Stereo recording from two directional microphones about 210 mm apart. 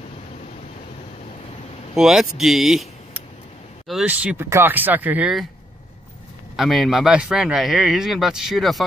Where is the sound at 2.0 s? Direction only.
Centre (ahead or behind).